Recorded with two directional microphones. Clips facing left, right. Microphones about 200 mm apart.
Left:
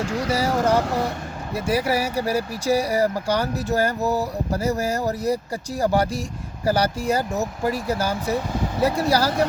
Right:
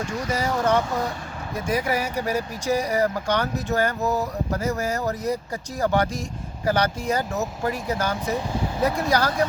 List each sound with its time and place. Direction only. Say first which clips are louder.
0.3 s speech: left 1 dB; 10° left (ahead or behind)